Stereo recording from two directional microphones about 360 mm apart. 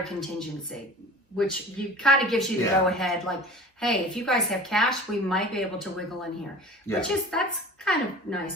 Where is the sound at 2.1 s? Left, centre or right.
Centre.